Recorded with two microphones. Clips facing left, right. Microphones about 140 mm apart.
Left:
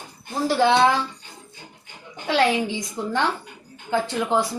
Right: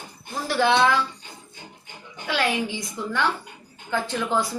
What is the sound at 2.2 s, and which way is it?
Speech, 30° left (ahead or behind).